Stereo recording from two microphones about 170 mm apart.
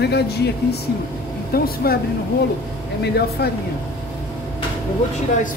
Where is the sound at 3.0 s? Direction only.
70° left (ahead or behind).